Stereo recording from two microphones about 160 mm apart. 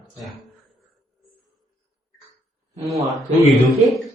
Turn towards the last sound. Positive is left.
turn(degrees=0)  # may be behind; listen again after turning